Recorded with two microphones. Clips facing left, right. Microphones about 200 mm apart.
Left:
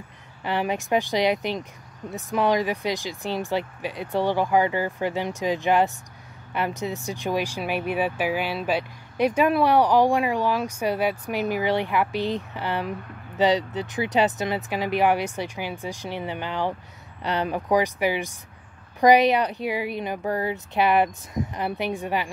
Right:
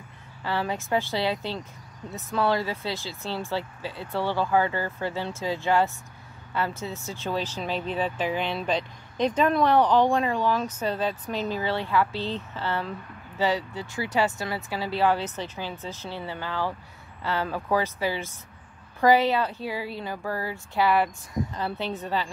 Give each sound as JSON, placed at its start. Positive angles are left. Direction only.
{"t": 0.4, "sound": "speech", "side_deg": 15}